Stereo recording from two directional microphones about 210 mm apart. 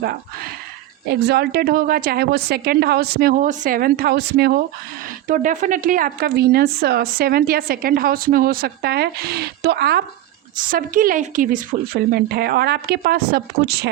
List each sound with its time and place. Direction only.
1.0 s speech: 50° right (ahead or behind)
5.3 s speech: 40° right (ahead or behind)